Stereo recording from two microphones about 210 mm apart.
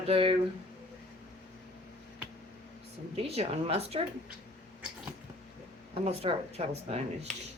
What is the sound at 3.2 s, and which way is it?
Speech, 30° right (ahead or behind).